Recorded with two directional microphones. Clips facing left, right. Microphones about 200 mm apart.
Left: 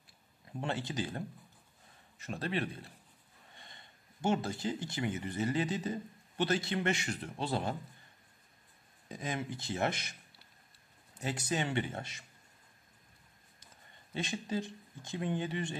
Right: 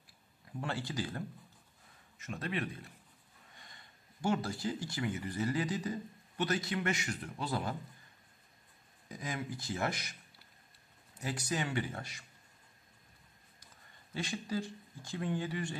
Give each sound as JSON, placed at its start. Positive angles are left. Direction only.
{"t": 0.5, "sound": "speech", "side_deg": 20}
{"t": 2.1, "sound": "speech", "side_deg": 35}
{"t": 9.1, "sound": "speech", "side_deg": 25}
{"t": 11.1, "sound": "speech", "side_deg": 25}
{"t": 14.1, "sound": "speech", "side_deg": 20}